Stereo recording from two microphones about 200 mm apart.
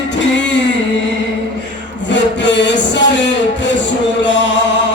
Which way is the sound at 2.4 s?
60° left (ahead or behind).